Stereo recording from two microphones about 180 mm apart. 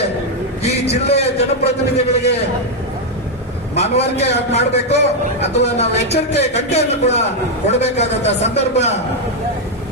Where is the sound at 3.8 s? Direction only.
35° left (ahead or behind).